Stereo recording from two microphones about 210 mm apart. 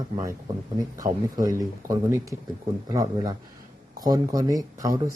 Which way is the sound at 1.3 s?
15° right (ahead or behind).